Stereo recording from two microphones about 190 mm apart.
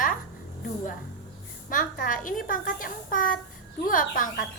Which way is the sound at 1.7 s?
45° left (ahead or behind).